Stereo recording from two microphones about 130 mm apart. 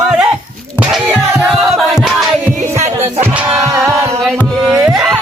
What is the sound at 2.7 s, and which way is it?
Music, 55° right (ahead or behind).